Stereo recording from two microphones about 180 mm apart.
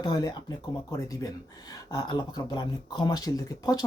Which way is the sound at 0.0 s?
20° left (ahead or behind).